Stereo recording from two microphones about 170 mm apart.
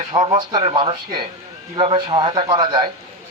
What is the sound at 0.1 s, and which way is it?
Speech, 25° right (ahead or behind).